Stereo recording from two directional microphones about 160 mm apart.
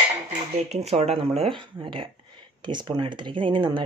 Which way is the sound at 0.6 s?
40° right (ahead or behind).